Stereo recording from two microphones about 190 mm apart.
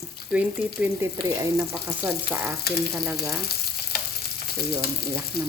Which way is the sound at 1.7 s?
10° right (ahead or behind).